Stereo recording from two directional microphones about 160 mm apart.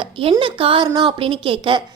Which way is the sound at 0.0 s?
35° right (ahead or behind).